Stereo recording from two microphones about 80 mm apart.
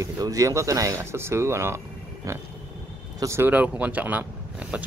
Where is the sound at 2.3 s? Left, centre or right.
Right.